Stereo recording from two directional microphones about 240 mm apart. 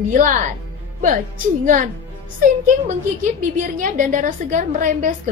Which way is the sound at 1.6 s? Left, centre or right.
Right.